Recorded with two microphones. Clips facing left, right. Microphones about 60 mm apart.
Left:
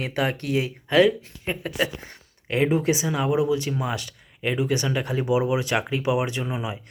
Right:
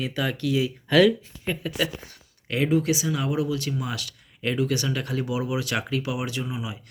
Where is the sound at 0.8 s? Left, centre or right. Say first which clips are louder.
Even; left.